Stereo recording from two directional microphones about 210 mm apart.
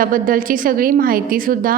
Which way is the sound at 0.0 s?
40° right (ahead or behind).